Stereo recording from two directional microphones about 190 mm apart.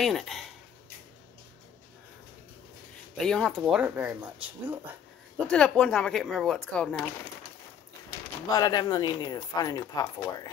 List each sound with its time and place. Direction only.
0.0 s speech: centre (ahead or behind)
3.2 s speech: 5° left (ahead or behind)
5.5 s speech: 5° left (ahead or behind)
8.5 s speech: 20° left (ahead or behind)